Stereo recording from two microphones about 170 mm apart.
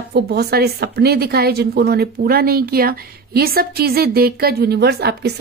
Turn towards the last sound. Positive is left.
turn(degrees=-75)  # may be behind; listen again after turning